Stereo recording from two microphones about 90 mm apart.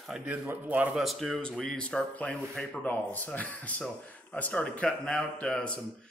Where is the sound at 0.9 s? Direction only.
Centre (ahead or behind).